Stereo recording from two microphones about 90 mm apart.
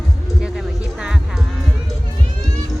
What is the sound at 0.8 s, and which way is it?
Music, 10° right (ahead or behind).